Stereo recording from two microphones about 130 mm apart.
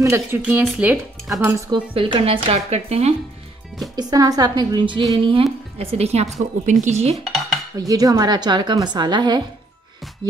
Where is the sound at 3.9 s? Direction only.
30° right (ahead or behind).